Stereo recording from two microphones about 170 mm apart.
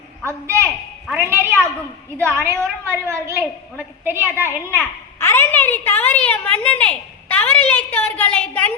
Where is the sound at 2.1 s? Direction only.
15° right (ahead or behind).